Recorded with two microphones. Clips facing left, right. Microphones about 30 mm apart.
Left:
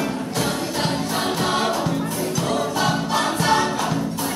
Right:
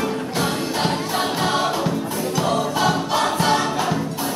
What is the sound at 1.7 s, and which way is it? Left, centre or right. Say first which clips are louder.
Choir: even; centre.